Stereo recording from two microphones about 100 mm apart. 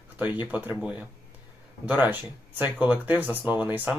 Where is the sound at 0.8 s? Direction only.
10° right (ahead or behind).